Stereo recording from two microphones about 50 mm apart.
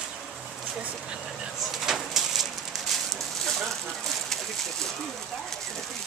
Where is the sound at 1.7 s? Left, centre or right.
Centre.